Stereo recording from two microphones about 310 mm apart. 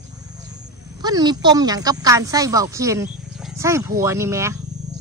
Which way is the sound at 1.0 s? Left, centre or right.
Centre.